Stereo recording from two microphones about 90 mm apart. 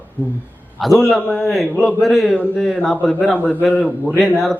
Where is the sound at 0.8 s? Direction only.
Centre (ahead or behind).